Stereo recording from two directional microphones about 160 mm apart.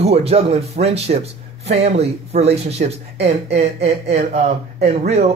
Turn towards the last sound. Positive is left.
turn(degrees=-45)  # may be behind; listen again after turning